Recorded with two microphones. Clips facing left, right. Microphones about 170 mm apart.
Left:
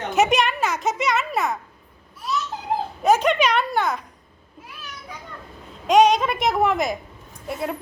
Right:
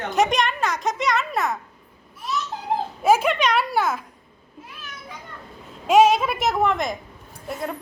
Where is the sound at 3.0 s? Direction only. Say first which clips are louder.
Left 1 dB; 5° right (ahead or behind).